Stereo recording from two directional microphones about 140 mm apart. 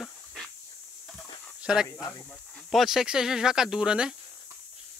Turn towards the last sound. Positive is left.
turn(degrees=-5)  # may be behind; listen again after turning